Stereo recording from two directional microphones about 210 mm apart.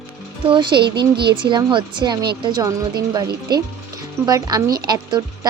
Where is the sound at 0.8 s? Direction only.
50° right (ahead or behind).